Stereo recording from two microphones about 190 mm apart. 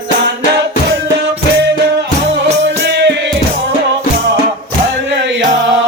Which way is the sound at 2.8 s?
60° right (ahead or behind).